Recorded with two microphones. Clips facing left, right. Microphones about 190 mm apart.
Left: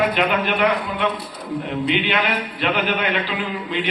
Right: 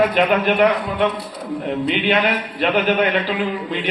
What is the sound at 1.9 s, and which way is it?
Speech, 45° right (ahead or behind).